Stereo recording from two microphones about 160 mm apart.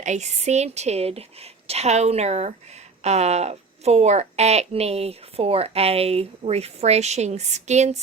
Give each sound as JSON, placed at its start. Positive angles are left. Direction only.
{"t": 0.0, "sound": "a woman's voice", "side_deg": -45}